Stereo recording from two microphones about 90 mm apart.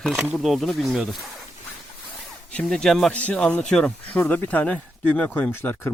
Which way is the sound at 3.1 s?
15° left (ahead or behind).